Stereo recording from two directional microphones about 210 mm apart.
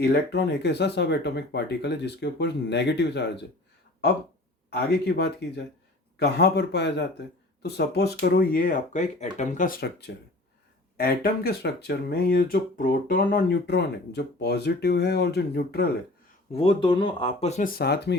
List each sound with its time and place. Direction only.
0.0 s speech: 50° left (ahead or behind)
4.9 s speech: 50° left (ahead or behind)
16.5 s speech: 25° left (ahead or behind); by 18.2 s 50° left (ahead or behind)